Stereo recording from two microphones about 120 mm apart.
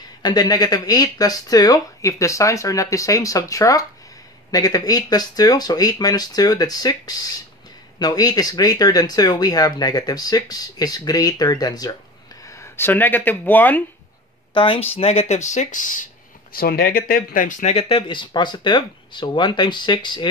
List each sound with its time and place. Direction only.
0.2 s speech: 35° left (ahead or behind)
12.4 s speech: 20° left (ahead or behind)
14.5 s speech: 45° left (ahead or behind)
15.0 s speech: 60° left (ahead or behind); by 16.1 s 90° left
17.4 s speech: 90° left; by 20.2 s 40° left (ahead or behind)